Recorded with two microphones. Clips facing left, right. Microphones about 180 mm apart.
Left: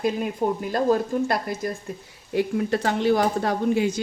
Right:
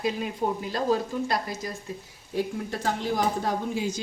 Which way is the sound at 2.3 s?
70° left (ahead or behind).